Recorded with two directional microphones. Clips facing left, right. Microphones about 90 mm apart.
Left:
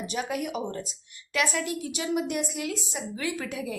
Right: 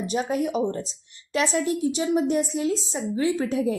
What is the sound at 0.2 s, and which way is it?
A woman's voice, 35° right (ahead or behind).